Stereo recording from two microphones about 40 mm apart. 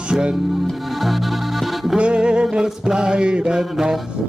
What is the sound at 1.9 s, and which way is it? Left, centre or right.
Music, right.